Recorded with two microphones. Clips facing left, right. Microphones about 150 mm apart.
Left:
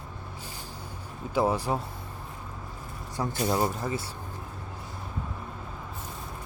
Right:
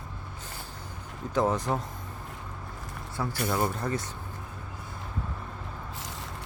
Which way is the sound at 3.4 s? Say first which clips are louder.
Left 2 dB; 20° left (ahead or behind).